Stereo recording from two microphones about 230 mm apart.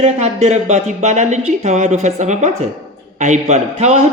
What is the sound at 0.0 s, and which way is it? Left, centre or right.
A woman's voice, right.